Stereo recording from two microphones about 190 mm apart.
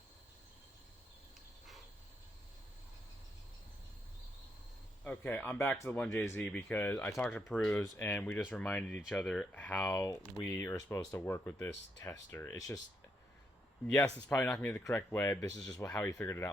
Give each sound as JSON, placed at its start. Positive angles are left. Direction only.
{"t": 5.0, "sound": "speech", "side_deg": 10}
{"t": 14.3, "sound": "speech", "side_deg": 10}